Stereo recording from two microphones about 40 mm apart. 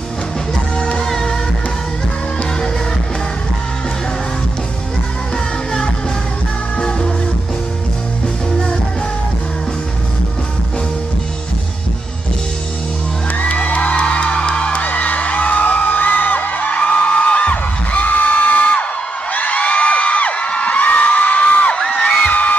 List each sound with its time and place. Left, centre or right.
1.0 s music: centre
13.4 s music: left
14.8 s music: left
16.5 s music: left
19.3 s a sound: left
21.9 s music: left